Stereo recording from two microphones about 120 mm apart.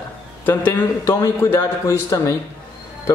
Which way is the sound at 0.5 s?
15° left (ahead or behind).